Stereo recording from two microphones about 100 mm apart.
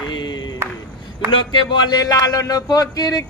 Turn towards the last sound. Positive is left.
turn(degrees=40)  # may be behind; listen again after turning